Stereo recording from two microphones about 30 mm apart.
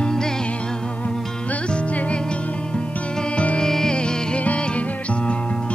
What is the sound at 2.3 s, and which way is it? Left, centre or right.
Music, left.